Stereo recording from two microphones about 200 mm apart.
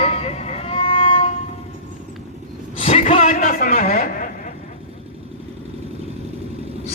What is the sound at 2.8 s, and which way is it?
A man's voice, 30° left (ahead or behind).